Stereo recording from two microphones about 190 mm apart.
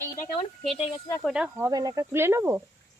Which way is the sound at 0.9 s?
20° left (ahead or behind).